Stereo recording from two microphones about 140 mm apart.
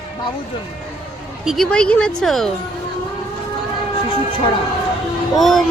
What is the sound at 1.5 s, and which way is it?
Speech, 5° left (ahead or behind).